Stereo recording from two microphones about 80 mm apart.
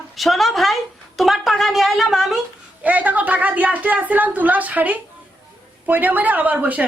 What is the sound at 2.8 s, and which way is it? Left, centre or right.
A woman's voice, centre.